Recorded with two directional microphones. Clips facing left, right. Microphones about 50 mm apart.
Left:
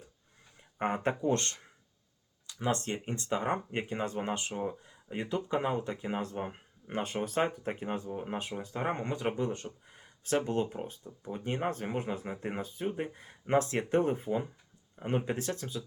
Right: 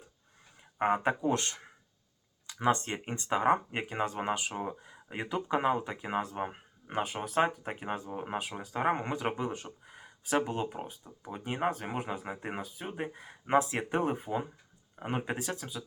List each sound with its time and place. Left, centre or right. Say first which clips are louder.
0.8 s speech: right 3 dB; centre